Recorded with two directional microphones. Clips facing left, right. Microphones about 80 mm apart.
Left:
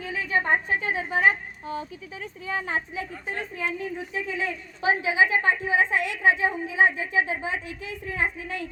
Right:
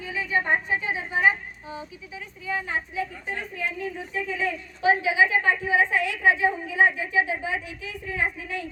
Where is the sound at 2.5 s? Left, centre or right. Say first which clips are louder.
Even; left.